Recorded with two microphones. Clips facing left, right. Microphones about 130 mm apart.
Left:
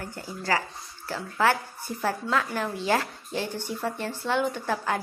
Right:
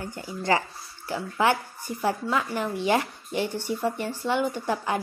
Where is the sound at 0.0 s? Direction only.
20° right (ahead or behind).